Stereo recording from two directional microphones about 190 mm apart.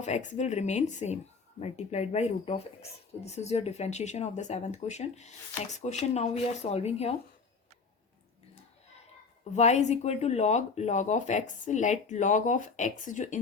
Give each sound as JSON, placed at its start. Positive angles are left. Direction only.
{"t": 0.0, "sound": "speech", "side_deg": 40}
{"t": 9.4, "sound": "speech", "side_deg": 35}